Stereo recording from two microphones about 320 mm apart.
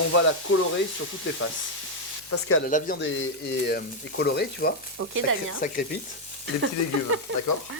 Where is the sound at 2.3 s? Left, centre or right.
Left.